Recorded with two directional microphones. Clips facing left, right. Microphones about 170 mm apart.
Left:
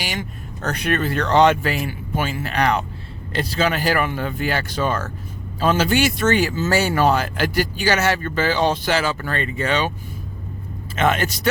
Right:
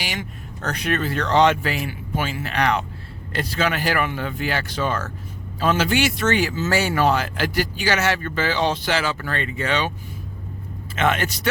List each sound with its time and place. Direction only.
0.0 s speech: 45° left (ahead or behind)
10.9 s speech: 40° left (ahead or behind)